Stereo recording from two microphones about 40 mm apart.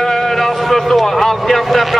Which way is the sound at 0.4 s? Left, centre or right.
Centre.